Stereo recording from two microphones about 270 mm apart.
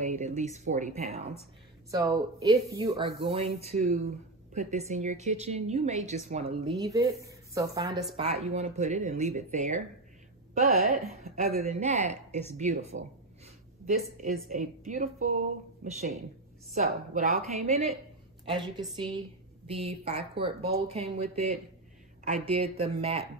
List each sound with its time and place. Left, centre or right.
0.0 s a woman's voice: right
1.9 s a woman's voice: centre
8.2 s a woman's voice: right
13.9 s a woman's voice: right